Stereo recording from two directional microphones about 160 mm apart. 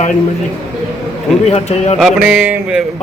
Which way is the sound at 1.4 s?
45° left (ahead or behind).